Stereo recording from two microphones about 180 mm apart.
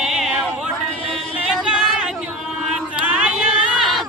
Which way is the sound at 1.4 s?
5° right (ahead or behind).